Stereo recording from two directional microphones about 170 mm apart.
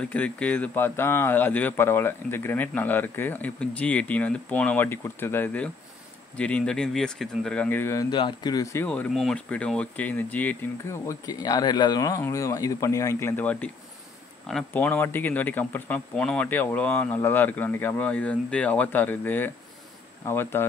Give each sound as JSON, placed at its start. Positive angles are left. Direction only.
{"t": 0.1, "sound": "speech", "side_deg": 10}
{"t": 8.8, "sound": "speech", "side_deg": 10}